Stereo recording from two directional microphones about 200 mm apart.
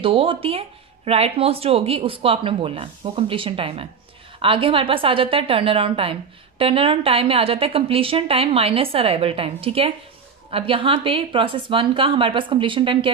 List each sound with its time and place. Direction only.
0.0 s speech: 25° right (ahead or behind)